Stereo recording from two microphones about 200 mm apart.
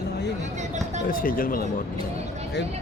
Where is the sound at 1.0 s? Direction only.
45° left (ahead or behind).